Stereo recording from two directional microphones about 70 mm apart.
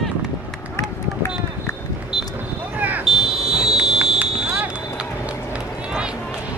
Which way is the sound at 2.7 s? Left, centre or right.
Right.